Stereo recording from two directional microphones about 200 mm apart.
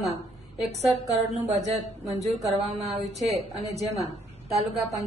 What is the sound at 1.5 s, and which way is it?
A woman's voice, 35° right (ahead or behind).